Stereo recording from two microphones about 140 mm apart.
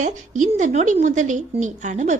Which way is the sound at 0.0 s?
65° right (ahead or behind).